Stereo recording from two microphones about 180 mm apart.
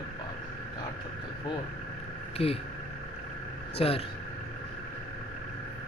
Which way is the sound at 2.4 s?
35° left (ahead or behind).